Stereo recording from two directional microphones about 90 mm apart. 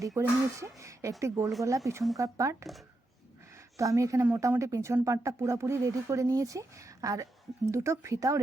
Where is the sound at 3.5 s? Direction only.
35° right (ahead or behind).